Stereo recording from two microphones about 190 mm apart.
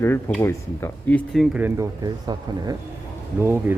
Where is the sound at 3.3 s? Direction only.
10° right (ahead or behind).